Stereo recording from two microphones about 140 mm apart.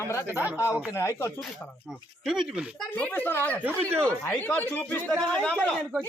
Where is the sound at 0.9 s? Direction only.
20° left (ahead or behind).